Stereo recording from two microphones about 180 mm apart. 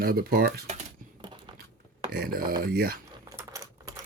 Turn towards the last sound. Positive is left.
turn(degrees=-20)  # may be behind; listen again after turning